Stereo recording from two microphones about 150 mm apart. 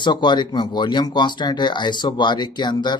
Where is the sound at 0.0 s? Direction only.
30° left (ahead or behind).